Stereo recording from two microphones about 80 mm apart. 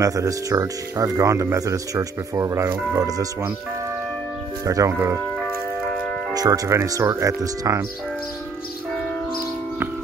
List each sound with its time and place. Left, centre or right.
0.0 s speech: right
3.0 s speech: right
4.6 s speech: right
5.4 s music: centre
6.3 s speech: right